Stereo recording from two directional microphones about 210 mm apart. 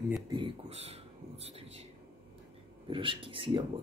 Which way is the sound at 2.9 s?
25° right (ahead or behind).